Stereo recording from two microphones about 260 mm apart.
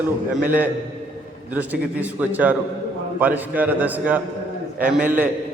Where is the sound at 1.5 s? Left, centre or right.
Centre.